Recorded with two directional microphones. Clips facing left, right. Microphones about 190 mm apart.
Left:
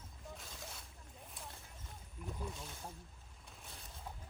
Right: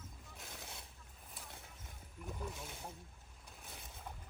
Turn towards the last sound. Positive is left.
turn(degrees=0)  # may be behind; listen again after turning